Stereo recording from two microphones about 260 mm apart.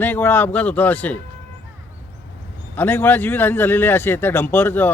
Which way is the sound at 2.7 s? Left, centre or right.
Centre.